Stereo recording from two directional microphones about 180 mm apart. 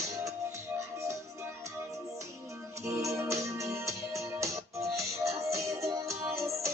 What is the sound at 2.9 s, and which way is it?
Music, 15° right (ahead or behind).